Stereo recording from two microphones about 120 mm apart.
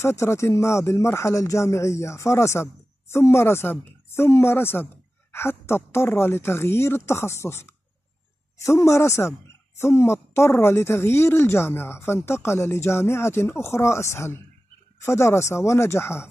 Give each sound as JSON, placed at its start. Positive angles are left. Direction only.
{"t": 0.0, "sound": "a woman's voice", "side_deg": 20}